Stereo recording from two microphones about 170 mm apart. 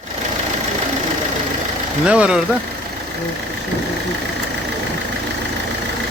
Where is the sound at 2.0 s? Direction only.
5° right (ahead or behind).